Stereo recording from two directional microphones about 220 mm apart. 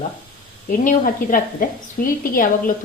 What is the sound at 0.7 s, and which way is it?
A woman's voice, 40° left (ahead or behind).